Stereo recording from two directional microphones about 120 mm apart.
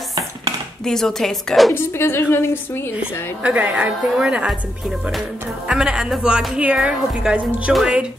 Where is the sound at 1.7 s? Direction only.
20° left (ahead or behind).